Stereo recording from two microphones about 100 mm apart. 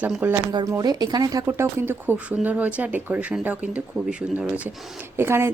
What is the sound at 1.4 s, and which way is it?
Speech, 25° right (ahead or behind).